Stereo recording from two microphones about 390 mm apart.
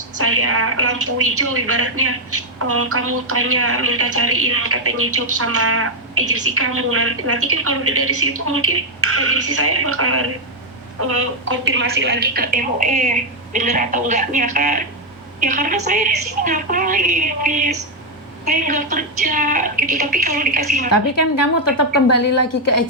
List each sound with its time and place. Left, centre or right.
0.2 s a woman's voice: right